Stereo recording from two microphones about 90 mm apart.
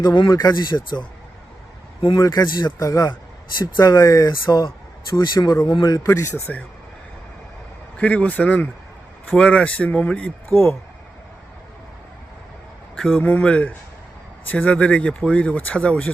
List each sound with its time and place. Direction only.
0.0 s speech: 60° left (ahead or behind)
0.3 s speech: 50° left (ahead or behind)
2.1 s speech: 45° left (ahead or behind)
6.1 s speech: 30° left (ahead or behind)
7.9 s speech: 15° left (ahead or behind)
13.1 s speech: 20° left (ahead or behind)